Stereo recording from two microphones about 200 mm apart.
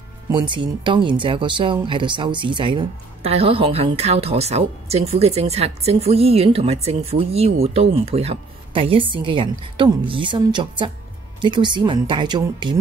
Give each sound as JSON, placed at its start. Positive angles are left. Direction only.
{"t": 0.3, "sound": "speech", "side_deg": -25}